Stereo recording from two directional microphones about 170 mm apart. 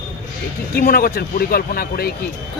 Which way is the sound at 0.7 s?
65° left (ahead or behind).